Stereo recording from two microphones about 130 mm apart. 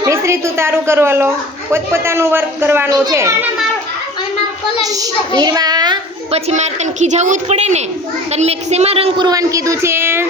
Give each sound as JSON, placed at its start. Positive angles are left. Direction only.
{"t": 0.0, "sound": "a woman's voice", "side_deg": -20}
{"t": 4.8, "sound": "a child's voice", "side_deg": -30}
{"t": 6.3, "sound": "a woman's voice", "side_deg": -60}
{"t": 9.1, "sound": "a child's voice", "side_deg": -30}